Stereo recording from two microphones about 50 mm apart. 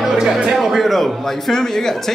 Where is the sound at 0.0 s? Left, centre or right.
Centre.